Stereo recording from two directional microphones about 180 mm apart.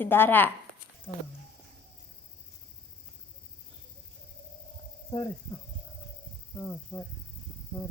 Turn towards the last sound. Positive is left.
turn(degrees=15)  # may be behind; listen again after turning